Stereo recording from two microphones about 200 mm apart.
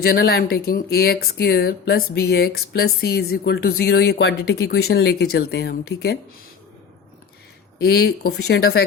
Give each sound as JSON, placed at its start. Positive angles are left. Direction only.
{"t": 0.0, "sound": "speech", "side_deg": 50}
{"t": 7.8, "sound": "speech", "side_deg": 55}